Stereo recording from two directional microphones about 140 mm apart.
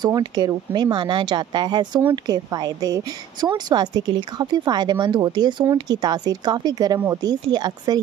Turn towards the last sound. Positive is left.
turn(degrees=-30)  # may be behind; listen again after turning